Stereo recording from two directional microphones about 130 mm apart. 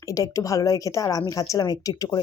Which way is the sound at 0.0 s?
25° left (ahead or behind).